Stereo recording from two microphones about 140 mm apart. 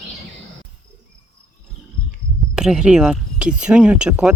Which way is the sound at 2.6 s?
5° right (ahead or behind).